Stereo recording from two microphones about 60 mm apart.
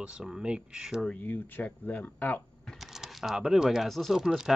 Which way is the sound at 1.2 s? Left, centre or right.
Left.